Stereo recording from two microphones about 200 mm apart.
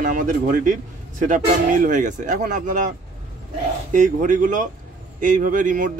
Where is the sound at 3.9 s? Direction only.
40° right (ahead or behind).